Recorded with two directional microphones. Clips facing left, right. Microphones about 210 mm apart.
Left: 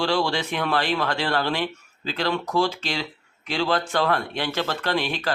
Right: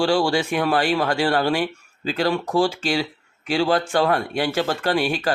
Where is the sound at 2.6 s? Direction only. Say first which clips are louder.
Right 4 dB; 50° right (ahead or behind).